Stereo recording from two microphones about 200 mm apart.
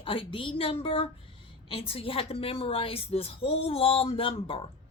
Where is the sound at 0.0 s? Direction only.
25° left (ahead or behind).